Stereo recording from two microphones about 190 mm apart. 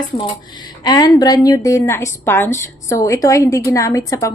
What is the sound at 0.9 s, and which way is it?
A woman's voice, 20° left (ahead or behind).